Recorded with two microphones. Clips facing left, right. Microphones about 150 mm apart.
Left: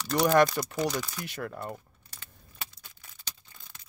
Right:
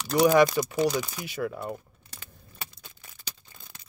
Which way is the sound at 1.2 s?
5° right (ahead or behind).